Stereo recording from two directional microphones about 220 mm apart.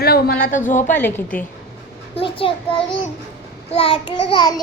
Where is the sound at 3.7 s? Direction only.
25° left (ahead or behind).